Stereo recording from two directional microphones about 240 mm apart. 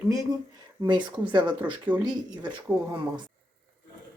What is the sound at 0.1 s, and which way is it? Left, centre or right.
Speech, centre.